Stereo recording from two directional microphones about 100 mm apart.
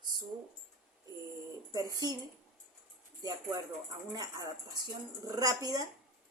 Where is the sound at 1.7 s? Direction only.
40° right (ahead or behind).